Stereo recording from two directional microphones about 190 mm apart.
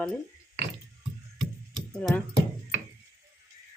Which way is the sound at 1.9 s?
5° left (ahead or behind).